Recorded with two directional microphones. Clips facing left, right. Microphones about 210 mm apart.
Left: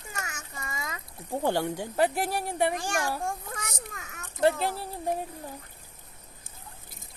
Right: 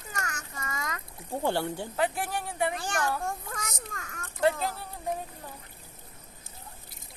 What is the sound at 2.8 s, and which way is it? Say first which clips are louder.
A child's voice: even; 10° left (ahead or behind).